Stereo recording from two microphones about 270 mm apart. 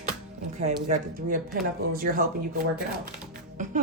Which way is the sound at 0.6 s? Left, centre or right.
Right.